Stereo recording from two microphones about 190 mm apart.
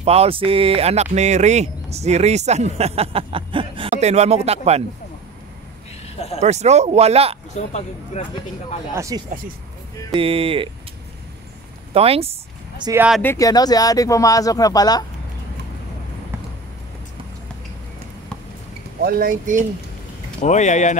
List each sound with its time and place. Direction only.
0.0 s speech: 30° right (ahead or behind)
6.4 s speech: 35° right (ahead or behind)
7.5 s speech: 35° left (ahead or behind)
8.9 s speech: 15° right (ahead or behind)
10.1 s speech: 30° right (ahead or behind)
11.9 s speech: 30° right (ahead or behind)
12.8 s speech: 10° right (ahead or behind)
13.2 s speech: 15° left (ahead or behind)
19.0 s speech: 50° right (ahead or behind)
20.4 s speech: 40° left (ahead or behind)